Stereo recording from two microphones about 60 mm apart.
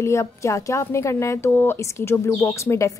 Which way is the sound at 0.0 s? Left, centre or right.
Left.